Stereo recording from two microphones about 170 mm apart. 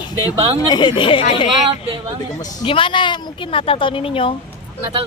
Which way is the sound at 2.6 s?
30° left (ahead or behind).